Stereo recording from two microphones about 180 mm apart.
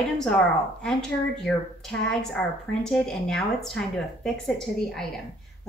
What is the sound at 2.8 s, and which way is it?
A woman's voice, 5° left (ahead or behind).